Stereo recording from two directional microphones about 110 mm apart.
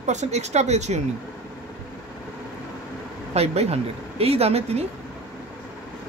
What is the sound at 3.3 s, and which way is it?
A woman's voice, 75° right (ahead or behind).